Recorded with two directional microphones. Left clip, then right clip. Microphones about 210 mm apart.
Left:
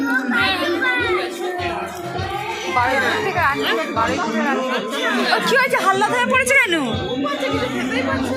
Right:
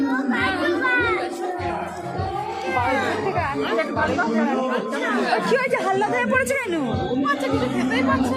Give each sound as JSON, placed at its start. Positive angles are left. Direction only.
{"t": 3.3, "sound": "speech", "side_deg": -15}
{"t": 5.3, "sound": "speech", "side_deg": -20}
{"t": 6.5, "sound": "speech", "side_deg": 0}